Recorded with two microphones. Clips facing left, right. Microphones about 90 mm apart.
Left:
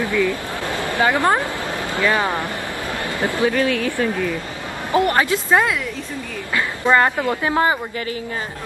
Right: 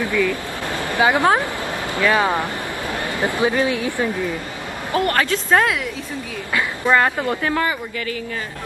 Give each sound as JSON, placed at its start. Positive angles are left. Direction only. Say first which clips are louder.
{"t": 0.1, "sound": "a sound", "louder": "even", "side_deg": 15}
{"t": 0.8, "sound": "a woman's voice", "louder": "right 1 dB", "side_deg": -15}
{"t": 4.9, "sound": "speech", "louder": "left 2 dB", "side_deg": 15}
{"t": 6.9, "sound": "speech", "louder": "left 1 dB", "side_deg": 5}
{"t": 7.4, "sound": "speech", "louder": "left 3 dB", "side_deg": 30}